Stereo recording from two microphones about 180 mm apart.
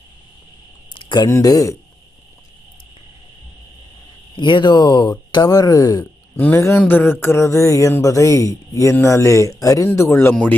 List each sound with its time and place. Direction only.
0.9 s a sound: 25° left (ahead or behind)
1.3 s speech: 20° left (ahead or behind)
4.4 s speech: 25° left (ahead or behind); by 10.5 s 10° left (ahead or behind)